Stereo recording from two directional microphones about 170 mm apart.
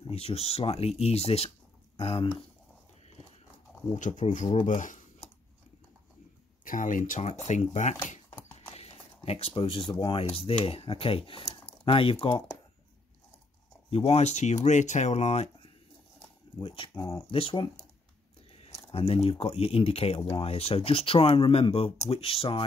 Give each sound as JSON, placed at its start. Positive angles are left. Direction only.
{"t": 0.0, "sound": "speech", "side_deg": 35}
{"t": 3.9, "sound": "speech", "side_deg": 45}
{"t": 6.6, "sound": "speech", "side_deg": 50}
{"t": 13.8, "sound": "speech", "side_deg": 35}
{"t": 16.6, "sound": "speech", "side_deg": 30}
{"t": 17.3, "sound": "speech", "side_deg": 30}
{"t": 18.9, "sound": "speech", "side_deg": 35}